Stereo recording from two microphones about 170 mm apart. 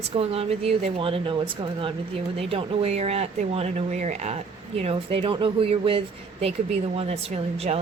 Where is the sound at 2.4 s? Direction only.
35° right (ahead or behind).